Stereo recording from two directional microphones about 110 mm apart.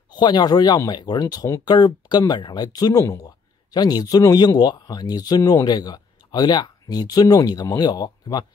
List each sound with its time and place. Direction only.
0.1 s speech: 40° left (ahead or behind)